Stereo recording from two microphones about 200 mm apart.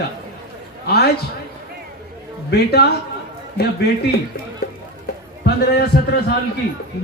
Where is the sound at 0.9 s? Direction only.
50° left (ahead or behind).